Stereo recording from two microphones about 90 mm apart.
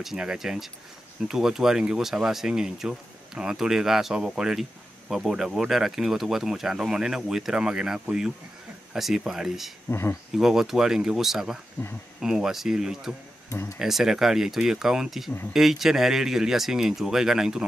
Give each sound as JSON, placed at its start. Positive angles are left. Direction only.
{"t": 0.0, "sound": "speech", "side_deg": -5}
{"t": 9.8, "sound": "speech", "side_deg": 25}
{"t": 10.3, "sound": "speech", "side_deg": -5}
{"t": 11.8, "sound": "speech", "side_deg": 15}
{"t": 12.2, "sound": "speech", "side_deg": -5}
{"t": 13.5, "sound": "speech", "side_deg": 35}
{"t": 13.7, "sound": "speech", "side_deg": -5}